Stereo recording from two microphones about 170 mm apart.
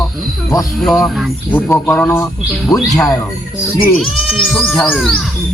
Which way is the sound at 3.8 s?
Centre (ahead or behind).